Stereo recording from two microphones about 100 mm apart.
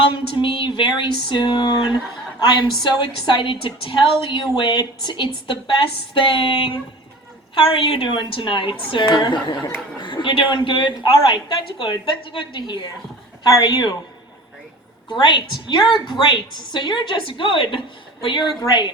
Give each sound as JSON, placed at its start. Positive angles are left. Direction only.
{"t": 0.0, "sound": "a sound", "side_deg": 55}
{"t": 2.9, "sound": "a woman's voice", "side_deg": 55}
{"t": 15.1, "sound": "a woman's voice", "side_deg": 50}